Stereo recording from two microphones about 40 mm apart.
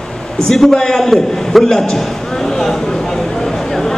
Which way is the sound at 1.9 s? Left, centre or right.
Centre.